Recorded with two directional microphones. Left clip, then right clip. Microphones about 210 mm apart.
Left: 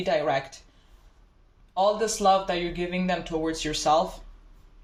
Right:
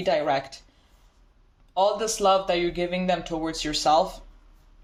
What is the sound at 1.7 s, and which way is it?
Speech, 50° right (ahead or behind).